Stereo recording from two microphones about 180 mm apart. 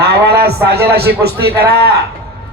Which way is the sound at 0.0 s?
65° right (ahead or behind).